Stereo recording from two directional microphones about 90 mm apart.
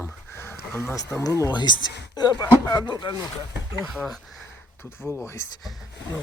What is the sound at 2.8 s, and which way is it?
Speech, 60° left (ahead or behind).